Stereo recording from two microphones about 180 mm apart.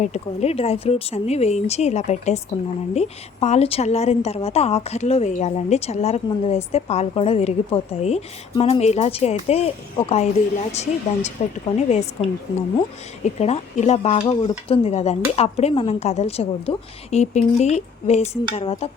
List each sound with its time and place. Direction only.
0.0 s a woman's voice: 40° left (ahead or behind)
13.2 s a woman's voice: 35° left (ahead or behind)